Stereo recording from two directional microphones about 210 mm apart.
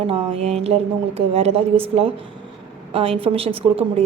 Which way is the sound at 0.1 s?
25° right (ahead or behind).